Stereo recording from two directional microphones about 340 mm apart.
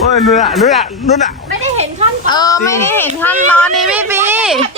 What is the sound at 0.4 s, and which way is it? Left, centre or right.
Speech, centre.